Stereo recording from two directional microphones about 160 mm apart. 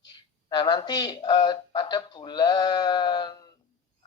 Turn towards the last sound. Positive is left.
turn(degrees=25)  # may be behind; listen again after turning